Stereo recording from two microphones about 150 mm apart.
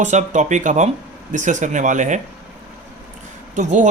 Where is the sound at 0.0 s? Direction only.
55° right (ahead or behind).